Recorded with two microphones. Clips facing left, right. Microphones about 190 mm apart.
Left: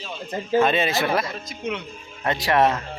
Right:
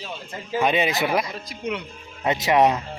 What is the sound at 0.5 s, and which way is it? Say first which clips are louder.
Speech: left 2 dB; 15° right (ahead or behind).